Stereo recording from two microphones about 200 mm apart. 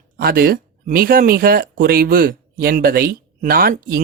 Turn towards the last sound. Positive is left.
turn(degrees=-50)  # may be behind; listen again after turning